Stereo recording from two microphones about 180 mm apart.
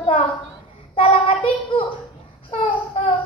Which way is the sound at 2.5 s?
35° left (ahead or behind).